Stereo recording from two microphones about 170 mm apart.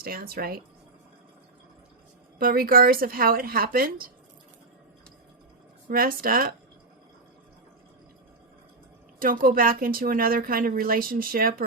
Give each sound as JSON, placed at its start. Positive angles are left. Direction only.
{"t": 0.0, "sound": "a woman's voice", "side_deg": -60}
{"t": 2.4, "sound": "a woman's voice", "side_deg": -55}
{"t": 5.9, "sound": "a woman's voice", "side_deg": -55}
{"t": 9.1, "sound": "a woman's voice", "side_deg": -55}